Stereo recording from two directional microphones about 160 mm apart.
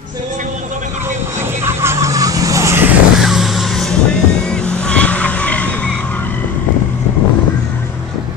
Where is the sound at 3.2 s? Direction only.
Centre (ahead or behind).